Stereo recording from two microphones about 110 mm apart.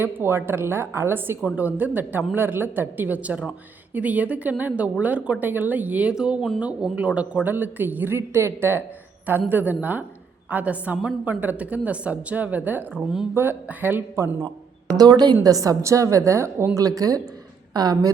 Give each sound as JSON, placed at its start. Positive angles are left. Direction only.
{"t": 0.0, "sound": "a woman's voice", "side_deg": -20}
{"t": 14.9, "sound": "a woman's voice", "side_deg": -35}